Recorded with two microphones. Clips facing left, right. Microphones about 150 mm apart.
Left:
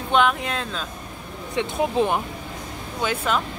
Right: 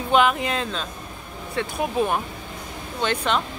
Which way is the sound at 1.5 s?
20° left (ahead or behind).